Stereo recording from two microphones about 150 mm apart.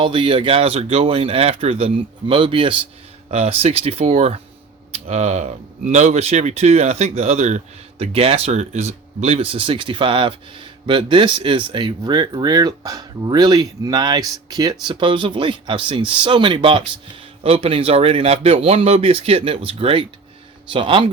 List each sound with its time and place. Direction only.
0.0 s speech: 35° right (ahead or behind)